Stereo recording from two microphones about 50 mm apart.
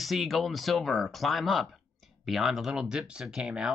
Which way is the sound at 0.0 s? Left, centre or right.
Centre.